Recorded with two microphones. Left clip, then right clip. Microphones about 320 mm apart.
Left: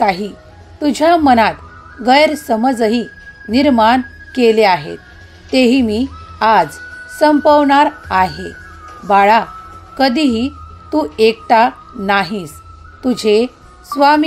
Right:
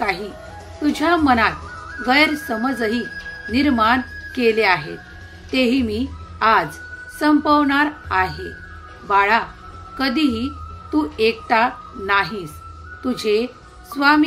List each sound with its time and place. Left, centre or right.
0.0 s a woman's voice: left